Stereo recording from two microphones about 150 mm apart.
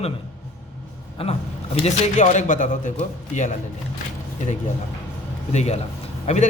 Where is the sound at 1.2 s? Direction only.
40° left (ahead or behind).